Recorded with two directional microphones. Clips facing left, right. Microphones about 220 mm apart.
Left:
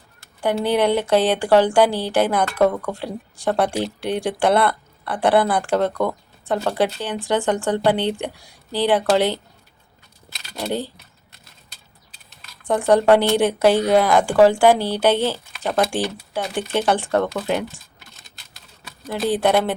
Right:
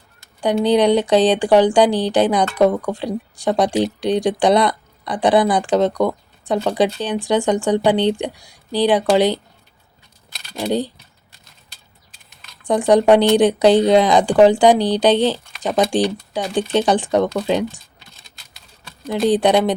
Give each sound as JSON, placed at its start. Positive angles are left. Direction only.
{"t": 0.6, "sound": "speech", "side_deg": -15}
{"t": 10.3, "sound": "a sound", "side_deg": 0}
{"t": 10.7, "sound": "speech", "side_deg": -15}
{"t": 12.6, "sound": "speech", "side_deg": -15}
{"t": 19.3, "sound": "speech", "side_deg": -15}